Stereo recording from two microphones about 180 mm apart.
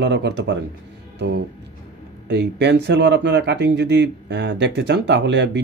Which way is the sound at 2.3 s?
70° right (ahead or behind).